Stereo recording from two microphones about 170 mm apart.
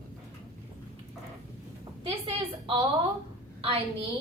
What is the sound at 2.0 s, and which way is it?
A woman's voice, 30° right (ahead or behind).